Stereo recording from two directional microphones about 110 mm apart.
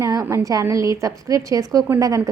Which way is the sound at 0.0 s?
30° right (ahead or behind).